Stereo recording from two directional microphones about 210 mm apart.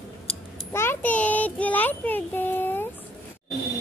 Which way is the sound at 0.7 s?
10° left (ahead or behind).